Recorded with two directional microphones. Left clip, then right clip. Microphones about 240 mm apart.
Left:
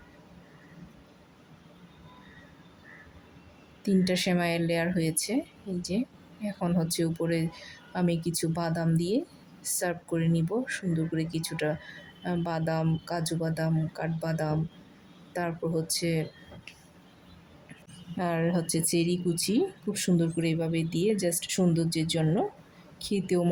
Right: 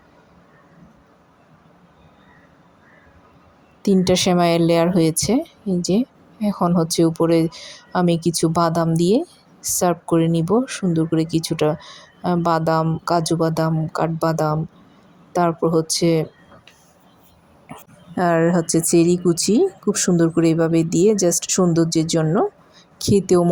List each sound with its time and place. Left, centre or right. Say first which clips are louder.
3.8 s speech: right 11 dB; right
18.2 s speech: right 12 dB; right